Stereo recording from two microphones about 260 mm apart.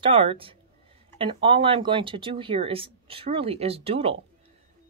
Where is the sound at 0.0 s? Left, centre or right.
Right.